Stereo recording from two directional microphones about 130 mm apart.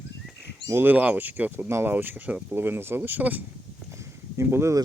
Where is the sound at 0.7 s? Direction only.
15° right (ahead or behind).